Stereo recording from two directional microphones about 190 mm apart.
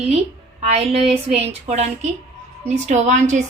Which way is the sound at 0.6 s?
35° right (ahead or behind).